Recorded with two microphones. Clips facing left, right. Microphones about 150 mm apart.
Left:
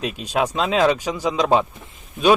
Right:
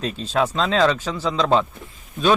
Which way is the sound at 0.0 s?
10° left (ahead or behind).